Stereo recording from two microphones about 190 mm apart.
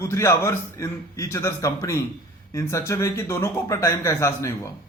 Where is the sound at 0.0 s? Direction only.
15° left (ahead or behind).